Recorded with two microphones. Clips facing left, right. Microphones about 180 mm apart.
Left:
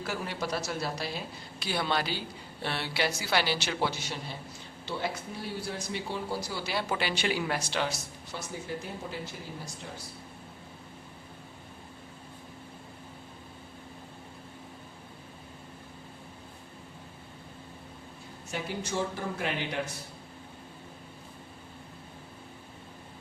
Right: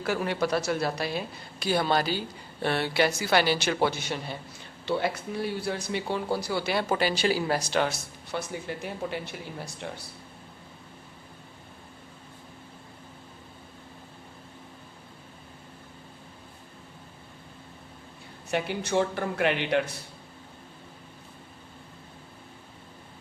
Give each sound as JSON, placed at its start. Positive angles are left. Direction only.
{"t": 0.0, "sound": "speech", "side_deg": -65}
{"t": 1.5, "sound": "a woman's voice", "side_deg": -45}
{"t": 18.5, "sound": "speech", "side_deg": -65}